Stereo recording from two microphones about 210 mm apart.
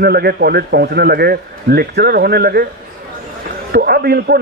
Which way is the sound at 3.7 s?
50° right (ahead or behind).